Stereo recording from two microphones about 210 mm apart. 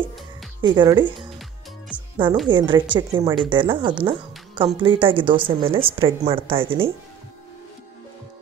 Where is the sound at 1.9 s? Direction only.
5° right (ahead or behind).